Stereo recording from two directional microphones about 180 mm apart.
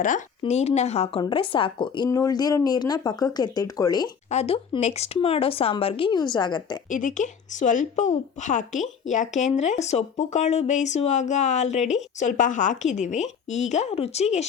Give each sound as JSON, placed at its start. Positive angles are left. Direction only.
{"t": 0.0, "sound": "speech", "side_deg": 40}
{"t": 4.3, "sound": "speech", "side_deg": 35}
{"t": 6.9, "sound": "speech", "side_deg": 45}